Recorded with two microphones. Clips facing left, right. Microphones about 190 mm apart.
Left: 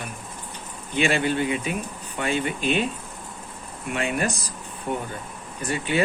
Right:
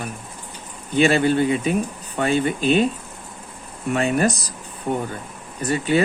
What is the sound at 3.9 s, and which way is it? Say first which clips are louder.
Speech: right 6 dB; 40° right (ahead or behind).